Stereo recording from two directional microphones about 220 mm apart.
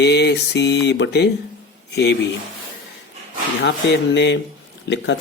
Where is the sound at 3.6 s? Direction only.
50° left (ahead or behind).